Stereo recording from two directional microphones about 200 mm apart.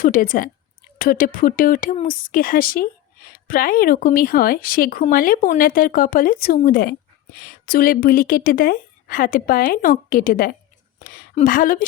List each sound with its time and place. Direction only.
0.0 s speech: 45° left (ahead or behind)